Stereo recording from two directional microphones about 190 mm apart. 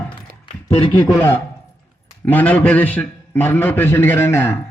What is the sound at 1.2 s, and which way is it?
A man's voice, 10° left (ahead or behind).